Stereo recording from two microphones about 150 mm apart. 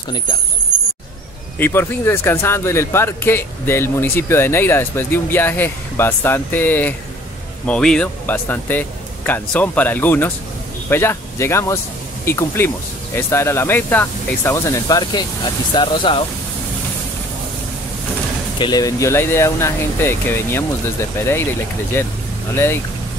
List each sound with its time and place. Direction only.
1.6 s speech: 15° left (ahead or behind); by 16.3 s 35° left (ahead or behind)
18.6 s speech: 25° left (ahead or behind)
21.9 s speech: 15° left (ahead or behind)